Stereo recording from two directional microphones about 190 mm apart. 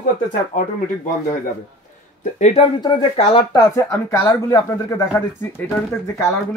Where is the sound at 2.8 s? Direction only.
25° left (ahead or behind).